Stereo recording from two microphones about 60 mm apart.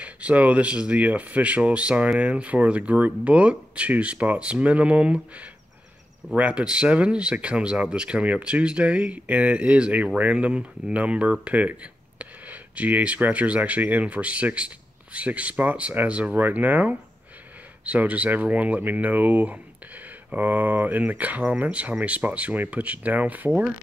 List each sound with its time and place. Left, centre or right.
0.0 s speech: right